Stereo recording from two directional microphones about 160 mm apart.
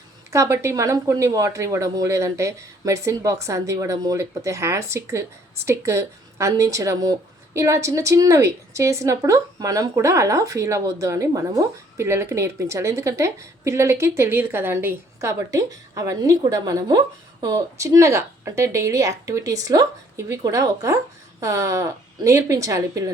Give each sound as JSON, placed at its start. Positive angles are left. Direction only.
{"t": 0.3, "sound": "speech", "side_deg": -15}